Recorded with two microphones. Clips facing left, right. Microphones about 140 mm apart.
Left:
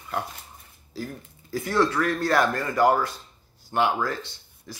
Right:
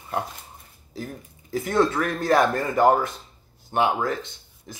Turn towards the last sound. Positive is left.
turn(degrees=-20)  # may be behind; listen again after turning